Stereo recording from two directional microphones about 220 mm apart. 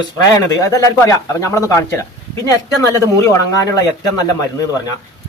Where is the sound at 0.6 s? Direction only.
15° left (ahead or behind).